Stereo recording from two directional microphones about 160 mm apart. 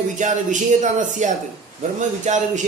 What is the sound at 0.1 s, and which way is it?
Speech, 50° right (ahead or behind).